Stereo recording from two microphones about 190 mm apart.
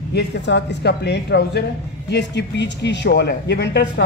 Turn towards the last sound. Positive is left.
turn(degrees=60)  # may be behind; listen again after turning